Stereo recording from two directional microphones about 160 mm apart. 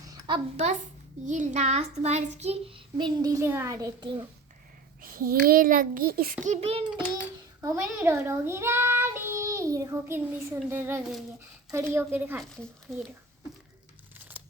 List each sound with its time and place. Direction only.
0.1 s a sound: 30° right (ahead or behind)
0.5 s a child's voice: 45° right (ahead or behind)
1.2 s child singing: 50° right (ahead or behind); by 4.3 s 30° right (ahead or behind)
5.0 s a child's voice: 60° right (ahead or behind)
6.4 s child singing: 45° right (ahead or behind)
7.8 s a child's voice: 15° right (ahead or behind)
12.4 s speech: centre (ahead or behind)